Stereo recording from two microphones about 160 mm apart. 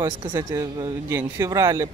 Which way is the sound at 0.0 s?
20° right (ahead or behind).